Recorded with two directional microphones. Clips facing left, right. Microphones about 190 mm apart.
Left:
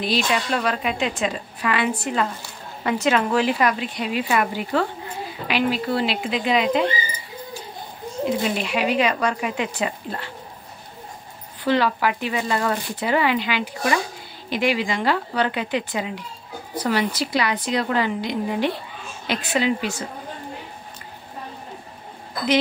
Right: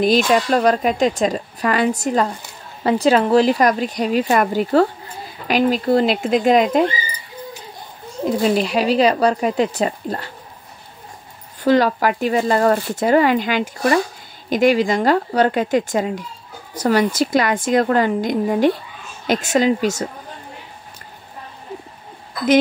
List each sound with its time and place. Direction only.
0.0 s speech: 45° right (ahead or behind)
8.5 s speech: 35° right (ahead or behind)
11.6 s speech: 45° right (ahead or behind)